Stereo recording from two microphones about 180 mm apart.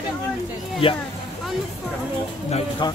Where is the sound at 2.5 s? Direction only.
35° left (ahead or behind).